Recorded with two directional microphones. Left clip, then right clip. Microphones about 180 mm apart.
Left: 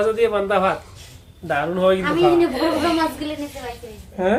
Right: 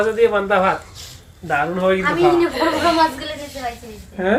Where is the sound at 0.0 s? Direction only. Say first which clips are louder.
Right 2 dB; 15° left (ahead or behind).